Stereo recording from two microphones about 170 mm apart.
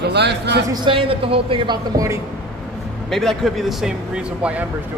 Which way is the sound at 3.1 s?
Centre (ahead or behind).